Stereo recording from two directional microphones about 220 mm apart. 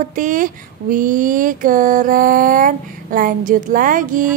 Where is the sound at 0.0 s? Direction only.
35° right (ahead or behind).